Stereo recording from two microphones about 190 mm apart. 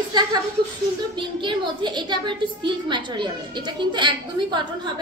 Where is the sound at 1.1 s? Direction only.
25° right (ahead or behind).